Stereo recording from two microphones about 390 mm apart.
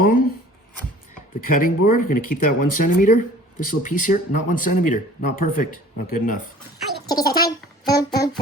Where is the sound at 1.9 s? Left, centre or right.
Left.